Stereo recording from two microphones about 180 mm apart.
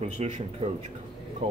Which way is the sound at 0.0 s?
35° right (ahead or behind).